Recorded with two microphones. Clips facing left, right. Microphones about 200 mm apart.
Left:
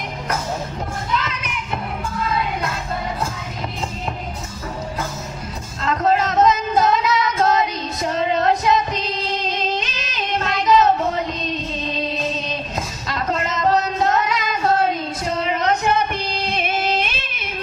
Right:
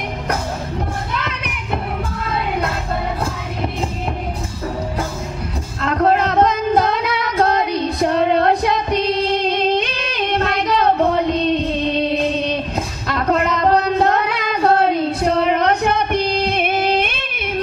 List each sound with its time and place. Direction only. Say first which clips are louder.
1.1 s child singing: left 1 dB; 60° right (ahead or behind)
5.8 s female singing: right 3 dB; 60° right (ahead or behind)